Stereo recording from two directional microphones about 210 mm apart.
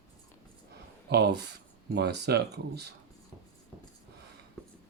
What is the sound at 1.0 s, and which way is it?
Speech, 50° right (ahead or behind).